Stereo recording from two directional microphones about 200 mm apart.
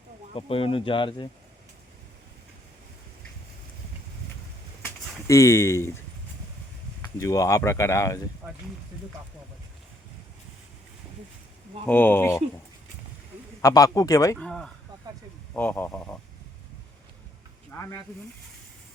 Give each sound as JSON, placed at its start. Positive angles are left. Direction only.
{"t": 0.3, "sound": "speech", "side_deg": 30}
{"t": 5.3, "sound": "speech", "side_deg": 15}
{"t": 7.2, "sound": "speech", "side_deg": 15}
{"t": 8.4, "sound": "speech", "side_deg": -5}
{"t": 11.9, "sound": "speech", "side_deg": 10}
{"t": 13.6, "sound": "speech", "side_deg": 15}
{"t": 14.3, "sound": "speech", "side_deg": 5}